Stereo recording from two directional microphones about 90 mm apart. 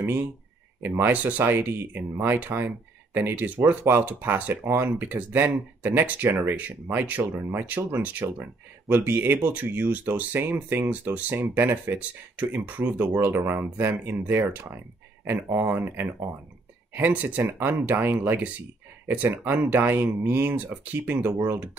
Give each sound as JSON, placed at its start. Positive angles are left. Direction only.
{"t": 0.8, "sound": "speech", "side_deg": -20}